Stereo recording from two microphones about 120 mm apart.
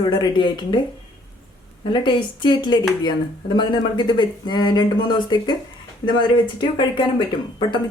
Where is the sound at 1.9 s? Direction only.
40° left (ahead or behind).